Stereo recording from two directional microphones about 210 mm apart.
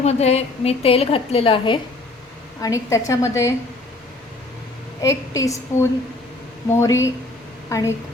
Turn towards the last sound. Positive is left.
turn(degrees=15)  # may be behind; listen again after turning